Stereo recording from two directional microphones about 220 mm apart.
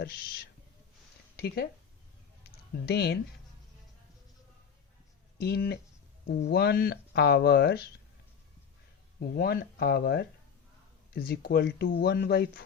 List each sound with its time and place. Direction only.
0.0 s speech: 45° left (ahead or behind)
2.8 s speech: 50° left (ahead or behind)
5.4 s speech: 45° left (ahead or behind)
9.2 s speech: 45° left (ahead or behind)